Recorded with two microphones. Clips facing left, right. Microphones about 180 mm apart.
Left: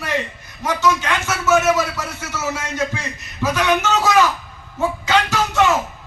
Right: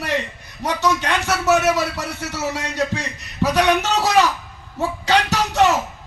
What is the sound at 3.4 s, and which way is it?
Speech, 35° right (ahead or behind).